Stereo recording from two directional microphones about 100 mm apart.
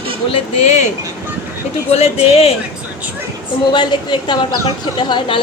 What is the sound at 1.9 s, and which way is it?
Speech, 90° left.